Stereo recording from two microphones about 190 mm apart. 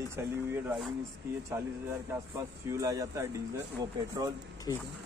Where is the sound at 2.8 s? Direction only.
15° right (ahead or behind).